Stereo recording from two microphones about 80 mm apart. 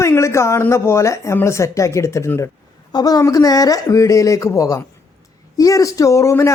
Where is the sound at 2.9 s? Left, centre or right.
Left.